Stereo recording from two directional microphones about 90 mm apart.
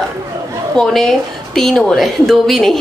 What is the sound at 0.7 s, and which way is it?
A woman's voice, 5° left (ahead or behind).